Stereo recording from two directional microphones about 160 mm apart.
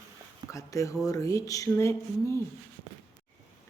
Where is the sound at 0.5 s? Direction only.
20° left (ahead or behind).